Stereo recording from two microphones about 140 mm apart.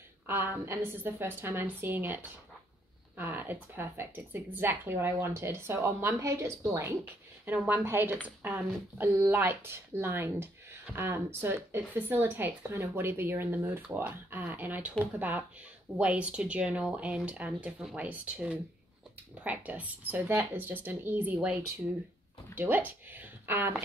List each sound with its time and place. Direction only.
0.3 s speech: 15° right (ahead or behind)
22.6 s speech: 15° right (ahead or behind)